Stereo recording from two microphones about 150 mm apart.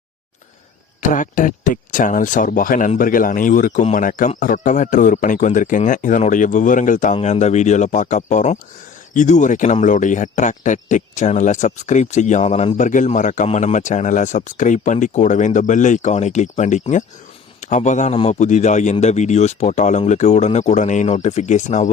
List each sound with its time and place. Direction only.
1.1 s a man's voice: 60° left (ahead or behind)